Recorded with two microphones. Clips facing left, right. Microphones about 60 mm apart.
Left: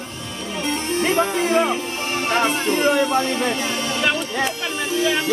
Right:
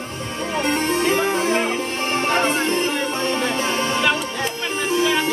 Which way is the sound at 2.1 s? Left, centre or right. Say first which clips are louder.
Even; right.